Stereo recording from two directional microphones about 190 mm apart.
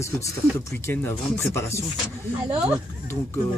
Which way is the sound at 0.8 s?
15° left (ahead or behind).